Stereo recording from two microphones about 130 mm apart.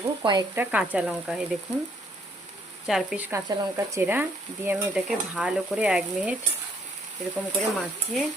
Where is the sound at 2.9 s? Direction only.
5° right (ahead or behind).